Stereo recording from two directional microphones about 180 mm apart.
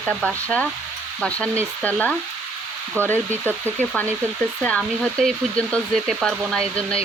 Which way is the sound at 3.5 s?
10° left (ahead or behind).